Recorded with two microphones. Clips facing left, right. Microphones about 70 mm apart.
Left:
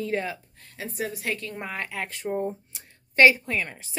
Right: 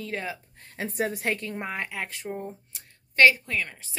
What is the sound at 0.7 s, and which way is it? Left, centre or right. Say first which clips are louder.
Speech: right 3 dB; right.